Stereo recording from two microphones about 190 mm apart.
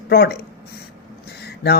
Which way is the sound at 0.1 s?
55° left (ahead or behind).